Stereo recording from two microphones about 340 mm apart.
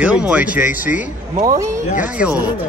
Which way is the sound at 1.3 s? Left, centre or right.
Centre.